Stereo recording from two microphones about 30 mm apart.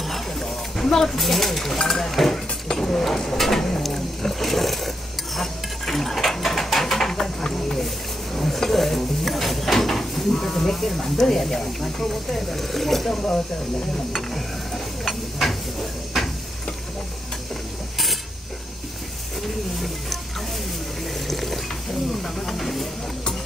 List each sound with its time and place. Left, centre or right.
0.0 s a sound: centre
0.8 s speech: centre
1.1 s speech: centre
2.3 s a sound: centre
3.1 s speech: centre
3.8 s dishes: centre
10.4 s speech: centre
15.0 s a sound: centre
16.1 s tick-tock: centre
21.3 s water: centre
22.2 s hiss: centre